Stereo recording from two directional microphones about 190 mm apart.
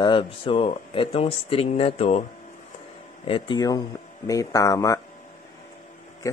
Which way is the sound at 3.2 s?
25° left (ahead or behind).